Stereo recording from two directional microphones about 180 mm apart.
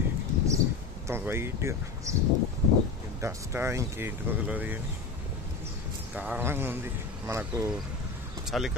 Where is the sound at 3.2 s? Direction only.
15° right (ahead or behind).